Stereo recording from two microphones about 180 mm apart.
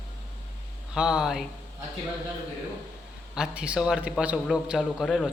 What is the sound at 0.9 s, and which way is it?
Speech, 5° right (ahead or behind).